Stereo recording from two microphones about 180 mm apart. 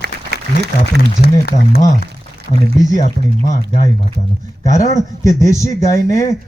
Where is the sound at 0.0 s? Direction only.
65° right (ahead or behind).